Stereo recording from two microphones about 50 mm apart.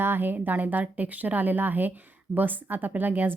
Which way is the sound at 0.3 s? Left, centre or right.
Right.